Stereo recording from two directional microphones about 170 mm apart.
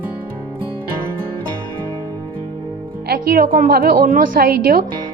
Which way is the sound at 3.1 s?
60° right (ahead or behind).